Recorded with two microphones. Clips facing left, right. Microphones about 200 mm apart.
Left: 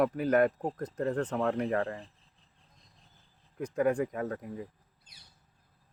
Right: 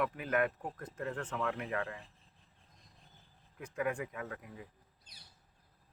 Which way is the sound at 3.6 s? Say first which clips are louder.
Left 8 dB; 40° left (ahead or behind).